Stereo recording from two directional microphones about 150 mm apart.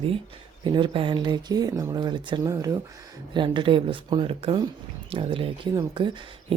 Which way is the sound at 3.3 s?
30° right (ahead or behind).